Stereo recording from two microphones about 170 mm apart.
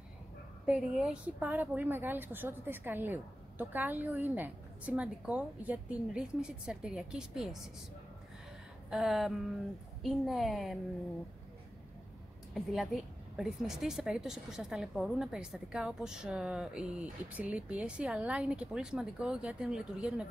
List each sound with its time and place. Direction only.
0.7 s a woman's voice: 10° right (ahead or behind)
8.9 s a woman's voice: centre (ahead or behind)
12.5 s a woman's voice: centre (ahead or behind)